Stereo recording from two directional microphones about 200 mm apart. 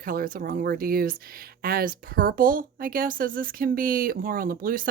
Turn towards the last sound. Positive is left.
turn(degrees=-45)  # may be behind; listen again after turning